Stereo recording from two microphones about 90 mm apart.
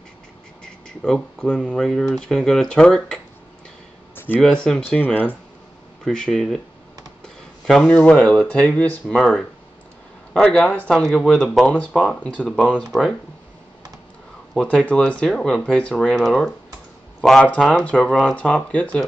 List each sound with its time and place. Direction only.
1.0 s speech: 5° left (ahead or behind)
4.1 s a sound: 25° left (ahead or behind)
4.4 s speech: 5° left (ahead or behind)
4.8 s speech: 20° left (ahead or behind)
6.0 s speech: 5° left (ahead or behind)
7.6 s speech: 10° left (ahead or behind)
9.1 s speech: 5° left (ahead or behind)
14.5 s speech: 10° left (ahead or behind)